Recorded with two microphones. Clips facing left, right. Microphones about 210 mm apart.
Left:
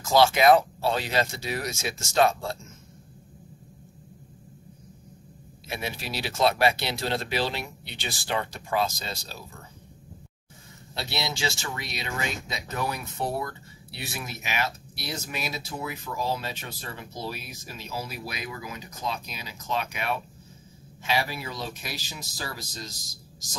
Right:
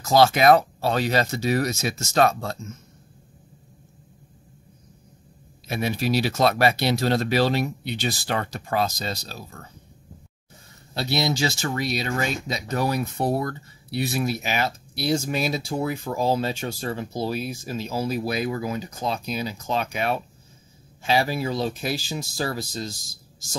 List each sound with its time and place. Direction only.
0.0 s speech: 40° right (ahead or behind)
5.7 s speech: 45° right (ahead or behind)
11.0 s speech: 45° right (ahead or behind)
15.9 s speech: 50° right (ahead or behind)
16.2 s speech: 30° right (ahead or behind)